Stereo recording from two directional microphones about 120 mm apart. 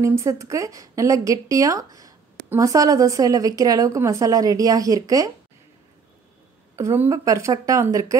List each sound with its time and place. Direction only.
0.0 s speech: 25° right (ahead or behind)
6.8 s speech: 25° right (ahead or behind)